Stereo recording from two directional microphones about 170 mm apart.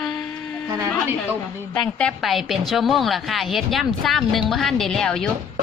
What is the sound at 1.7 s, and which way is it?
A woman's voice, 5° left (ahead or behind).